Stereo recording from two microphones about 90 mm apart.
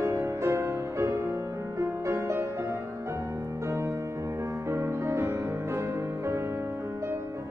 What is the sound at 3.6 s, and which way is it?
Music, 30° right (ahead or behind).